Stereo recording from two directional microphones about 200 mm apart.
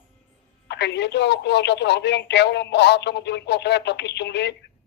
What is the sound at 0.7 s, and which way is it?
Speech, 60° left (ahead or behind).